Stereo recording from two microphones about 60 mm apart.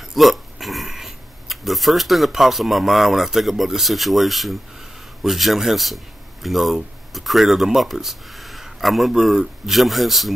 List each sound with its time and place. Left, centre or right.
0.1 s a man's voice: centre